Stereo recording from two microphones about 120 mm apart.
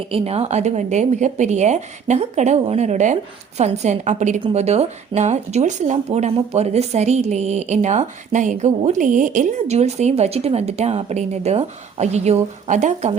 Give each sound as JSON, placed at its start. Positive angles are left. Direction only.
{"t": 0.1, "sound": "a woman's voice", "side_deg": -60}
{"t": 4.5, "sound": "speech", "side_deg": -65}